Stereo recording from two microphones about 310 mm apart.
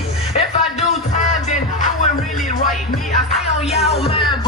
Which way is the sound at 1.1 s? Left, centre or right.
Left.